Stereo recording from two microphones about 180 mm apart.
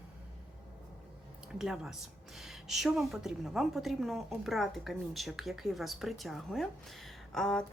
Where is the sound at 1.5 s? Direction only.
5° right (ahead or behind).